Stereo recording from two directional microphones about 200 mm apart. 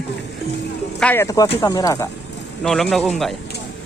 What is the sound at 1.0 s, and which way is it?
Speech, 10° left (ahead or behind).